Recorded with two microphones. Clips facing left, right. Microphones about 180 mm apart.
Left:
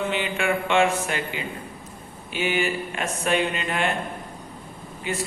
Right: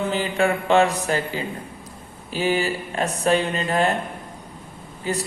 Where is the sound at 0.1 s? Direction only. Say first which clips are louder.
Right 3 dB; 40° right (ahead or behind).